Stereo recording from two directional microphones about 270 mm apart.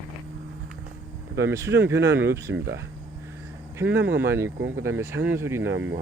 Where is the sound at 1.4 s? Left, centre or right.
Centre.